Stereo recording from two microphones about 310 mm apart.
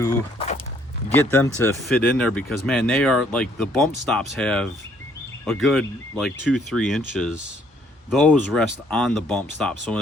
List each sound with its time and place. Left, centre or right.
0.0 s speech: centre
1.1 s speech: centre